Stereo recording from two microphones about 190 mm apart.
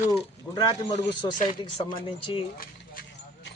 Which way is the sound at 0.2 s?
25° left (ahead or behind).